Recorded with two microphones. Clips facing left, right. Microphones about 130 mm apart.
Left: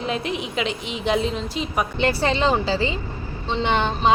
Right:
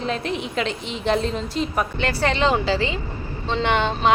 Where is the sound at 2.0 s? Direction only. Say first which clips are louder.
Left 3 dB; 15° left (ahead or behind).